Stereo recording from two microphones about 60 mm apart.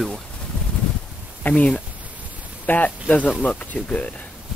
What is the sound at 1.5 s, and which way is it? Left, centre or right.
Speech, centre.